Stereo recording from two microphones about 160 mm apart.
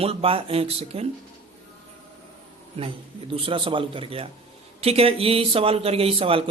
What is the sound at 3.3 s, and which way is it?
Speech, 35° right (ahead or behind).